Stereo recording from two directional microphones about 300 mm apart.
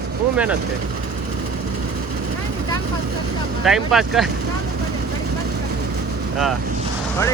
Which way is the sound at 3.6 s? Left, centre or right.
Centre.